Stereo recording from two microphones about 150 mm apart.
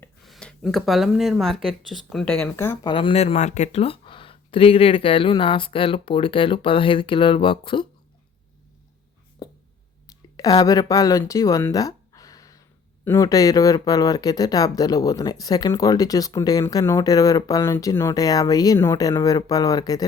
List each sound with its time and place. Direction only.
0.3 s speech: 5° left (ahead or behind)
2.8 s speech: 35° left (ahead or behind)
9.4 s a sound: 25° left (ahead or behind)
10.3 s speech: 25° left (ahead or behind)